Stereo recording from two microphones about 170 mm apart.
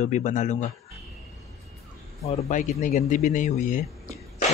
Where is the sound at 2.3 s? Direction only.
50° left (ahead or behind).